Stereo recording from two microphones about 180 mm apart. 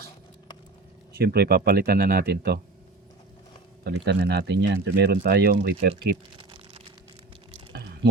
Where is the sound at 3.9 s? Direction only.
65° right (ahead or behind).